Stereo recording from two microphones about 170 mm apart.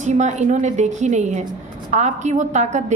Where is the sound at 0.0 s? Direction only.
45° right (ahead or behind).